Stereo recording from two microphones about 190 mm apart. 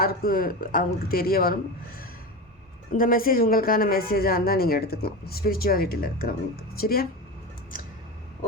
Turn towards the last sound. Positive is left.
turn(degrees=45)  # may be behind; listen again after turning